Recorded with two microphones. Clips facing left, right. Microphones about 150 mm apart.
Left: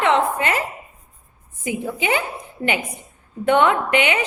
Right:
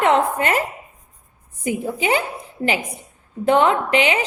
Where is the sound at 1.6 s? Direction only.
45° right (ahead or behind).